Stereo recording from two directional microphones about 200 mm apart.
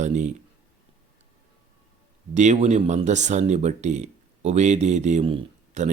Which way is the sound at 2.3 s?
35° right (ahead or behind).